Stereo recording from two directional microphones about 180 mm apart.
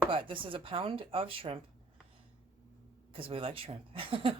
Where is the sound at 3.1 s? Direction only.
30° right (ahead or behind).